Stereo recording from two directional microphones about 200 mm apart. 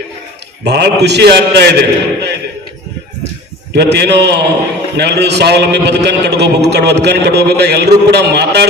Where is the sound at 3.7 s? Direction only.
55° right (ahead or behind).